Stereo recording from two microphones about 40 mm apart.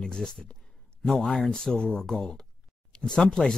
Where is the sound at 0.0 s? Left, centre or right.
Left.